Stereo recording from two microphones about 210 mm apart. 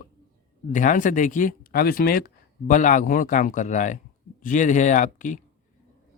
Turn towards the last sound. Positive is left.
turn(degrees=35)  # may be behind; listen again after turning